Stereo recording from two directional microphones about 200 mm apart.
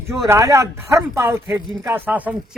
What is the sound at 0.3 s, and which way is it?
Speech, 15° right (ahead or behind).